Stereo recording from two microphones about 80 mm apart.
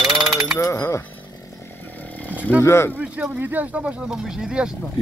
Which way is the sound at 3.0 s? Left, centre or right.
Centre.